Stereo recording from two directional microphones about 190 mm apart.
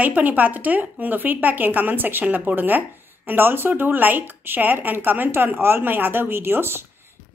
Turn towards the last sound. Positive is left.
turn(degrees=-10)  # may be behind; listen again after turning